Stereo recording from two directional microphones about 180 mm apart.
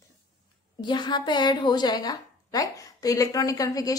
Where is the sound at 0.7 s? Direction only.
25° left (ahead or behind).